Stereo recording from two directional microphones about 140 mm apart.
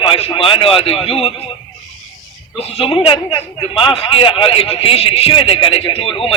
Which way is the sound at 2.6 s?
45° left (ahead or behind).